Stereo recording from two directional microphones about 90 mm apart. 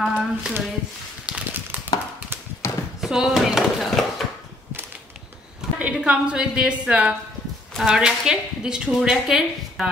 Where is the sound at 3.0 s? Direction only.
5° right (ahead or behind).